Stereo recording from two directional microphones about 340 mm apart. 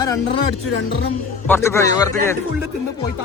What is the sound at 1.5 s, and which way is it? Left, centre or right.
Speech, centre.